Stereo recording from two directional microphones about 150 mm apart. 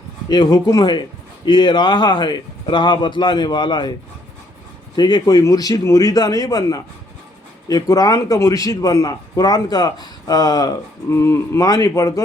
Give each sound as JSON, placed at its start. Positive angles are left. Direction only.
{"t": 0.3, "sound": "a man's voice", "side_deg": 25}
{"t": 4.9, "sound": "a man's voice", "side_deg": 30}